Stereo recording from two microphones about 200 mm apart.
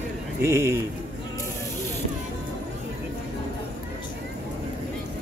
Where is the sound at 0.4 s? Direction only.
15° right (ahead or behind).